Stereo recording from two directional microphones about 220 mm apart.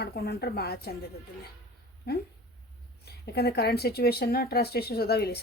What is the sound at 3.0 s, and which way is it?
A woman's voice, 45° left (ahead or behind).